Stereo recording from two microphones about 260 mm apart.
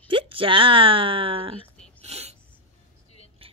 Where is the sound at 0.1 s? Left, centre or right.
Centre.